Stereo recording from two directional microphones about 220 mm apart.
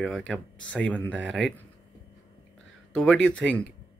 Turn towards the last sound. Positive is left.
turn(degrees=5)  # may be behind; listen again after turning